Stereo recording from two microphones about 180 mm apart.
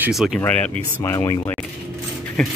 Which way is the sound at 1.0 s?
20° left (ahead or behind).